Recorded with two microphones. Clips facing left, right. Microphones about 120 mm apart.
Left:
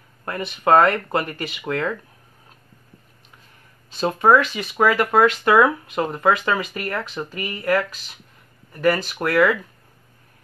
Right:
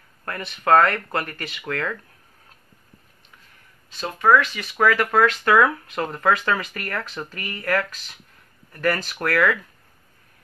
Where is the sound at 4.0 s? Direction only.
30° left (ahead or behind).